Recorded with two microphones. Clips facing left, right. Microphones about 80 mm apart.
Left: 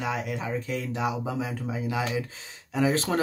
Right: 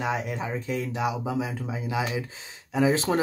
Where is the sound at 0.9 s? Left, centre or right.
Centre.